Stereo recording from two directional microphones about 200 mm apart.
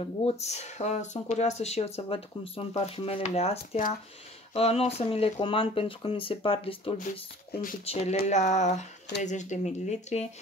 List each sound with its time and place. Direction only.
0.0 s speech: 30° left (ahead or behind)